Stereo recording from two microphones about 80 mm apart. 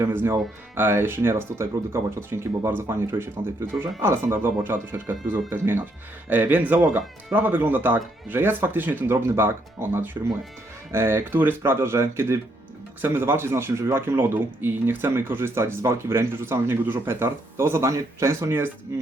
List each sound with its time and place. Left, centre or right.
0.0 s a man's voice: right